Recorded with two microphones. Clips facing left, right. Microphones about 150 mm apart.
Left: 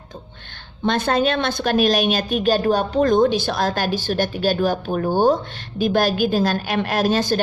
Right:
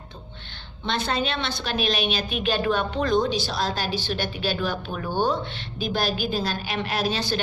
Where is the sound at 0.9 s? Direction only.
50° left (ahead or behind).